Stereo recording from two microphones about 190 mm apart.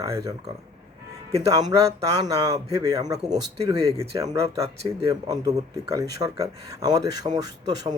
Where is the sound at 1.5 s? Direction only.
20° right (ahead or behind).